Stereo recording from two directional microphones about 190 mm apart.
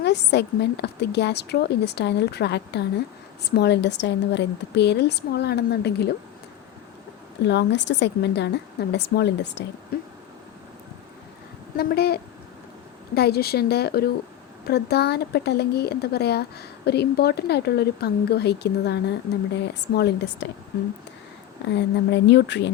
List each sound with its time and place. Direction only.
0.0 s speech: 60° left (ahead or behind)
7.4 s speech: 65° left (ahead or behind)
9.9 s speech: 55° left (ahead or behind)
11.8 s speech: 55° left (ahead or behind)
21.7 s speech: 65° left (ahead or behind)